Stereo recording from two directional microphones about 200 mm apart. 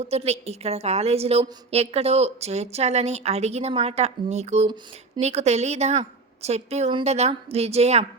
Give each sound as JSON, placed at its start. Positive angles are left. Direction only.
{"t": 0.0, "sound": "a woman's voice", "side_deg": -30}